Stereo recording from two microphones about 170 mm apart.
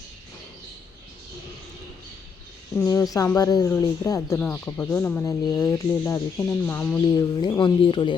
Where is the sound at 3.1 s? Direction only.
20° left (ahead or behind).